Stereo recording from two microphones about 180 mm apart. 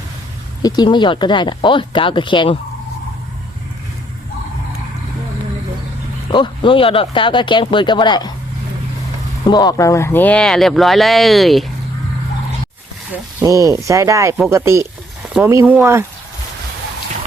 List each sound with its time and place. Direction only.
0.6 s speech: 25° left (ahead or behind)
6.3 s speech: 25° left (ahead or behind)
9.5 s speech: 20° left (ahead or behind); by 11.6 s centre (ahead or behind)
13.4 s speech: 20° right (ahead or behind)